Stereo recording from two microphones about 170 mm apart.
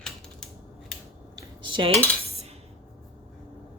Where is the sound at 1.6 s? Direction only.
30° right (ahead or behind).